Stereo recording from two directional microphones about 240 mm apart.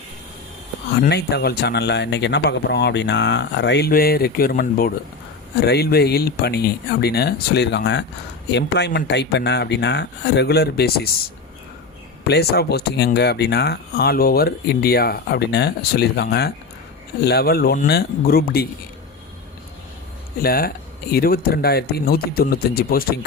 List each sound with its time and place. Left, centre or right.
1.0 s speech: left
12.2 s speech: left
20.4 s speech: left